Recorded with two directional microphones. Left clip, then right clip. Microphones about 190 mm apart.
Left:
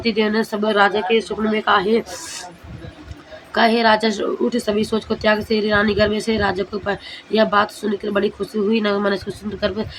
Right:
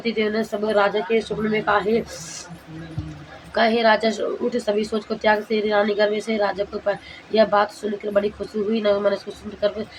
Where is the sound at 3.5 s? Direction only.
25° left (ahead or behind).